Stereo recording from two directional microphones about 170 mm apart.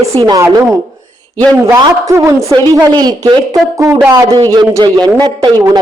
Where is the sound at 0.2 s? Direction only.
25° right (ahead or behind).